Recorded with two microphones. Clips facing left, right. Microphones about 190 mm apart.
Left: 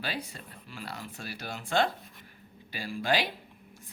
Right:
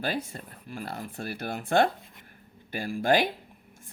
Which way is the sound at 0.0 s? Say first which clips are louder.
Right 6 dB; 50° right (ahead or behind).